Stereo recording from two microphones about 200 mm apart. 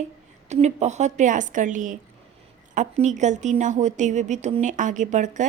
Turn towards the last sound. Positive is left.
turn(degrees=-40)  # may be behind; listen again after turning